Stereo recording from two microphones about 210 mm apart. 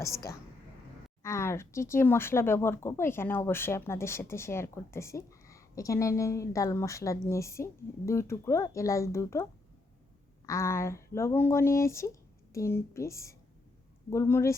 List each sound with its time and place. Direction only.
1.2 s speech: 15° left (ahead or behind)